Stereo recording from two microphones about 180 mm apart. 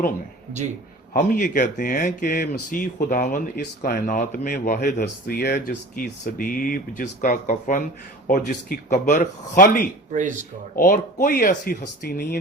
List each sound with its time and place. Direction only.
1.1 s speech: 45° left (ahead or behind)
10.1 s speech: 45° right (ahead or behind)
10.8 s speech: 50° left (ahead or behind)